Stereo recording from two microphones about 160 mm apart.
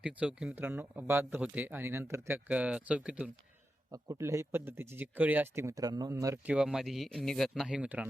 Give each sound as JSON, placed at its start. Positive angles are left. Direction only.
{"t": 0.0, "sound": "speech", "side_deg": -10}
{"t": 3.9, "sound": "speech", "side_deg": -20}
{"t": 6.4, "sound": "speech", "side_deg": -5}